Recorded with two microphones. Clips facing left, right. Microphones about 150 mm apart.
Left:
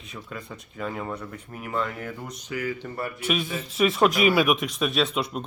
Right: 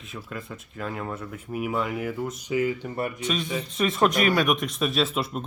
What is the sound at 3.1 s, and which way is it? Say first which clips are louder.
Speech: even; 5° left (ahead or behind).